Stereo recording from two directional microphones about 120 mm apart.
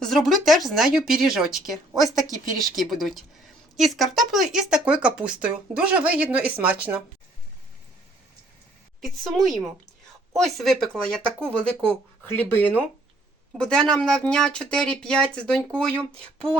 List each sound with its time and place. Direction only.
0.0 s speech: centre (ahead or behind)
9.0 s speech: centre (ahead or behind)
12.3 s speech: 15° left (ahead or behind)